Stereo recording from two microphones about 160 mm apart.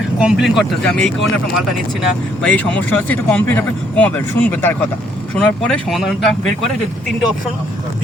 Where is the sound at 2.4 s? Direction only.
10° left (ahead or behind).